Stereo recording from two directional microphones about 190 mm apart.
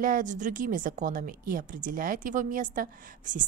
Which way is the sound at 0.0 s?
45° right (ahead or behind).